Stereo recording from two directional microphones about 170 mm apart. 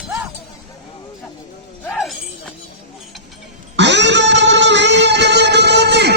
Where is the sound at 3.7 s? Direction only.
90° right.